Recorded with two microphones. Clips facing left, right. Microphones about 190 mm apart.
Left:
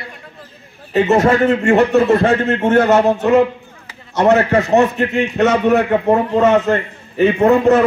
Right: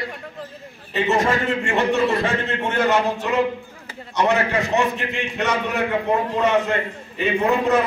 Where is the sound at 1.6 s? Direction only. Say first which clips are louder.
Left 7 dB; 55° left (ahead or behind).